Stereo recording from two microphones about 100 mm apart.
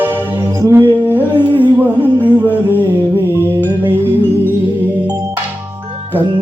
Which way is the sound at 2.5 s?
20° right (ahead or behind).